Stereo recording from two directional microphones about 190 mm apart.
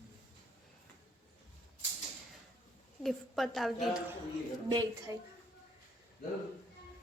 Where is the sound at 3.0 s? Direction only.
Centre (ahead or behind).